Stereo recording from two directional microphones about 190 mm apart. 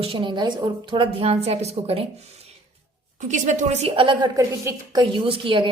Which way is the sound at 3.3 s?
40° right (ahead or behind).